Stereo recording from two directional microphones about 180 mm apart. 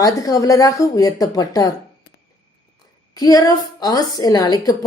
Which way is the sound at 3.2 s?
20° left (ahead or behind).